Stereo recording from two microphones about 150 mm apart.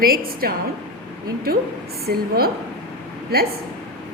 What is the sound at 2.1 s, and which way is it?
Speech, 90° right.